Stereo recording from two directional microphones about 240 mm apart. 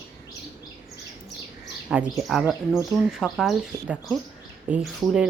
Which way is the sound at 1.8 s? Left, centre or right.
Centre.